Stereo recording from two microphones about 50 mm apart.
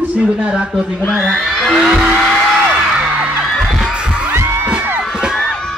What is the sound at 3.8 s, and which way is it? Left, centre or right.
Music, centre.